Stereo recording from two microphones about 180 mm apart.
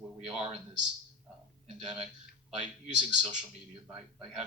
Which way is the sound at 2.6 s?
40° right (ahead or behind).